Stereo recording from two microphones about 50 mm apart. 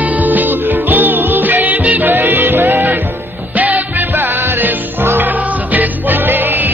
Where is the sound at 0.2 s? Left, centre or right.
Right.